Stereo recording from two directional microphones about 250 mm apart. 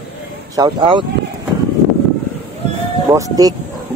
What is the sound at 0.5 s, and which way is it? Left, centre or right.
Speech, centre.